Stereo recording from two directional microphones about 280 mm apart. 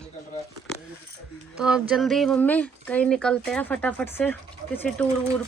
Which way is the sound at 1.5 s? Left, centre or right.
Centre.